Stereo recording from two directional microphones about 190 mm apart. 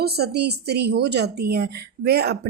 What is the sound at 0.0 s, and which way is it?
A woman's voice, 60° right (ahead or behind).